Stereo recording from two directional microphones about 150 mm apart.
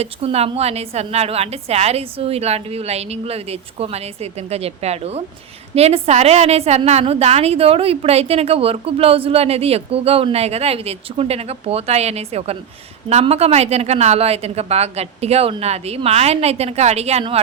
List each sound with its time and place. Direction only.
0.0 s a woman's voice: 40° right (ahead or behind)